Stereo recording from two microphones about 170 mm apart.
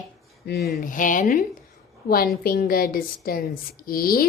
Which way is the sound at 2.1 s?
60° left (ahead or behind).